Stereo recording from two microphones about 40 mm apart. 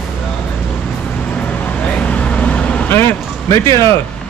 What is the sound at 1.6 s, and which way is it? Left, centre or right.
Vehicle, left.